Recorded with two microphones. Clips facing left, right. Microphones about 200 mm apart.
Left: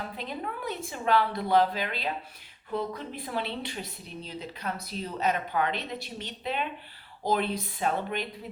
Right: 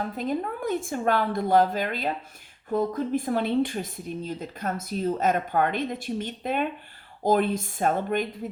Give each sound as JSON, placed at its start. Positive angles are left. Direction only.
{"t": 0.0, "sound": "speech", "side_deg": -45}